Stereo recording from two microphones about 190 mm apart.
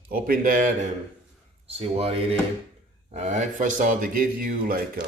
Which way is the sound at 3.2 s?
40° right (ahead or behind).